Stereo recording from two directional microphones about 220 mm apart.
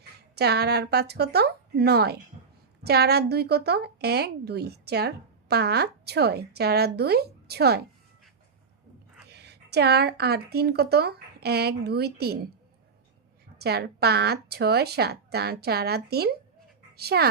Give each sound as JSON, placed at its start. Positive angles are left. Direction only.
{"t": 0.0, "sound": "a woman's voice", "side_deg": -50}
{"t": 9.3, "sound": "speech", "side_deg": -50}
{"t": 13.6, "sound": "a woman's voice", "side_deg": -45}